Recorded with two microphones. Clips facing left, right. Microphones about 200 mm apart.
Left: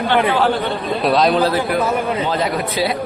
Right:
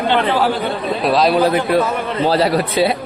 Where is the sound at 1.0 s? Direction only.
Centre (ahead or behind).